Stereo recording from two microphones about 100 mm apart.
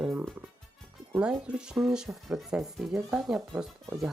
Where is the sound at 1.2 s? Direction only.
10° right (ahead or behind).